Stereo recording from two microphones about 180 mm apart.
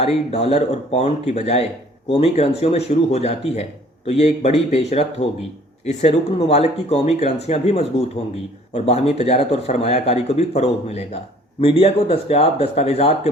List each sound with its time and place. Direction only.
0.0 s speech: 35° left (ahead or behind)